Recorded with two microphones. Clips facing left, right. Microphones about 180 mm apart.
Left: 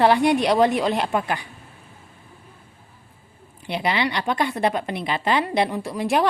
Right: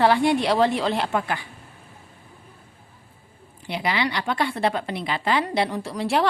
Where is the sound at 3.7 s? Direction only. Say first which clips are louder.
Left 2 dB; 20° left (ahead or behind).